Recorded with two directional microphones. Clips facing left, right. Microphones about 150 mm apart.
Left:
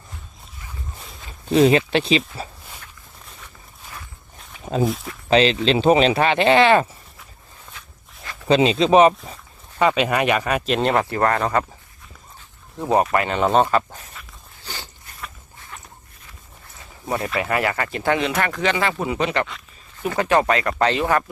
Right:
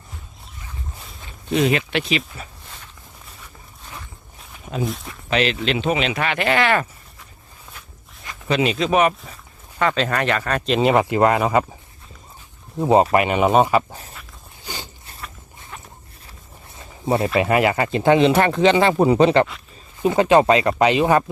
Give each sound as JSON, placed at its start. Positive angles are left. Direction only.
{"t": 1.5, "sound": "speech", "side_deg": 30}
{"t": 4.6, "sound": "speech", "side_deg": 30}
{"t": 4.9, "sound": "speech", "side_deg": 0}
{"t": 5.3, "sound": "speech", "side_deg": 30}
{"t": 8.4, "sound": "speech", "side_deg": 30}
{"t": 9.7, "sound": "speech", "side_deg": 15}
{"t": 10.7, "sound": "speech", "side_deg": -5}
{"t": 10.9, "sound": "speech", "side_deg": -15}
{"t": 12.8, "sound": "speech", "side_deg": -25}
{"t": 13.2, "sound": "speech", "side_deg": -10}
{"t": 14.6, "sound": "a sound", "side_deg": -15}
{"t": 17.1, "sound": "speech", "side_deg": -25}
{"t": 20.0, "sound": "speech", "side_deg": -20}